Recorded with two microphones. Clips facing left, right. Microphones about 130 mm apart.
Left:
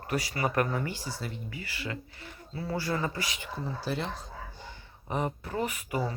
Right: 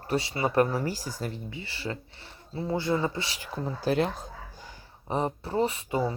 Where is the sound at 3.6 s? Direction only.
50° right (ahead or behind).